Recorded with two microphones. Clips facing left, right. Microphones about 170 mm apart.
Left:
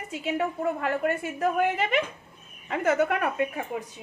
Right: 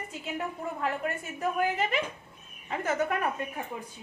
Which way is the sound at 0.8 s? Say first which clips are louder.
Left 5 dB; 60° left (ahead or behind).